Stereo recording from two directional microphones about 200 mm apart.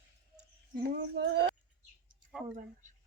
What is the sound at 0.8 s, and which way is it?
Speech, 50° right (ahead or behind).